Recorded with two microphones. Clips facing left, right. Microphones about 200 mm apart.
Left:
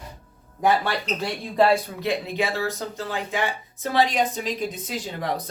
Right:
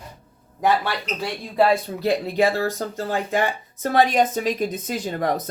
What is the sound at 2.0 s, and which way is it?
Speech, 40° right (ahead or behind).